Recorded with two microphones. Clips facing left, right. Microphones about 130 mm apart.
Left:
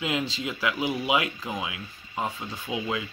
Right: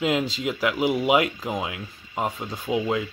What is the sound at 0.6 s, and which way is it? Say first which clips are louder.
Speech: right 5 dB; 45° right (ahead or behind).